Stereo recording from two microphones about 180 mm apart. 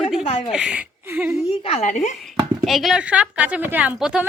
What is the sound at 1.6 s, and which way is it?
Speech, 35° left (ahead or behind).